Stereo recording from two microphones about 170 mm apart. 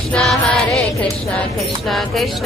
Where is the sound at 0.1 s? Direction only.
Centre (ahead or behind).